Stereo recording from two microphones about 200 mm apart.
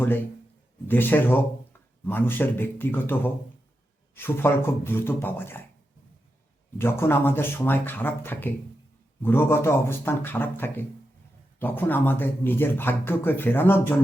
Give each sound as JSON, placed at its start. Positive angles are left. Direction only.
{"t": 0.0, "sound": "speech", "side_deg": 10}
{"t": 6.7, "sound": "speech", "side_deg": 10}